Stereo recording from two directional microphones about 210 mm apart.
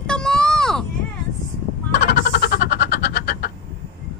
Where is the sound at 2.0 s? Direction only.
45° left (ahead or behind).